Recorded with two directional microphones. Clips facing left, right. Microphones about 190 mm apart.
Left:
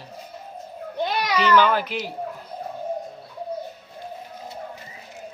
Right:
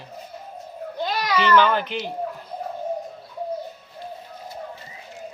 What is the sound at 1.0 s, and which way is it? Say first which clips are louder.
Children playing: left 1 dB; 20° left (ahead or behind).